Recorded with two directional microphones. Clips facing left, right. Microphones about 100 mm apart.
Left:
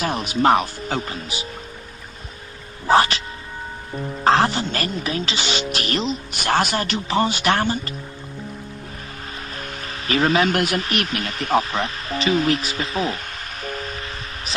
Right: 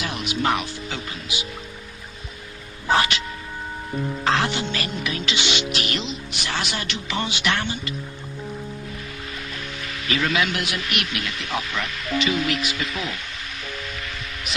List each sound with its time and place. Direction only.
0.0 s speech: 40° left (ahead or behind)
2.8 s speech: 35° left (ahead or behind)
9.5 s speech: 40° left (ahead or behind)